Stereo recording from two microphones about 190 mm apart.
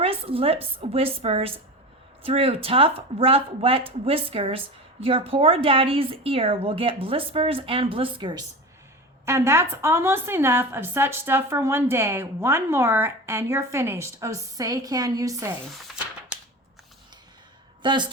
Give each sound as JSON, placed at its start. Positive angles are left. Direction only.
{"t": 0.0, "sound": "a woman's voice", "side_deg": -30}
{"t": 9.2, "sound": "a woman's voice", "side_deg": -15}
{"t": 17.8, "sound": "speech", "side_deg": -25}